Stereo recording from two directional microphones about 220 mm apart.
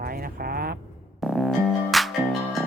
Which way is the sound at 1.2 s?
Centre (ahead or behind).